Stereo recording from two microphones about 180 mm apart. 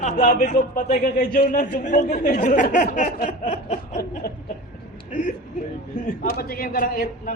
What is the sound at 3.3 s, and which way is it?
Snicker, 40° left (ahead or behind).